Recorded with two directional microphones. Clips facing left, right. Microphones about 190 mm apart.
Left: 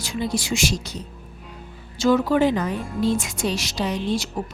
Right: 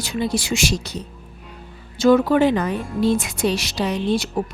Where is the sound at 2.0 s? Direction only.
55° right (ahead or behind).